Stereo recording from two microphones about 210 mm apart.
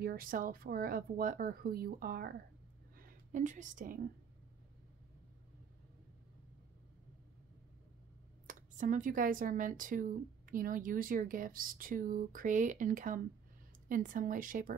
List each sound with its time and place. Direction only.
0.0 s a woman's voice: 45° right (ahead or behind)
8.5 s speech: 40° right (ahead or behind)